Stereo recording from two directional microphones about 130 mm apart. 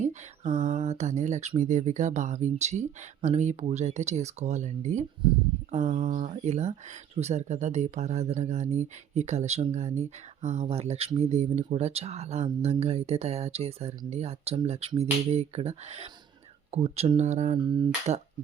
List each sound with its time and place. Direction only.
0.0 s speech: 65° right (ahead or behind)